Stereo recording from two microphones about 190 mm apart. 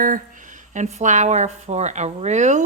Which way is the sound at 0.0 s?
45° right (ahead or behind).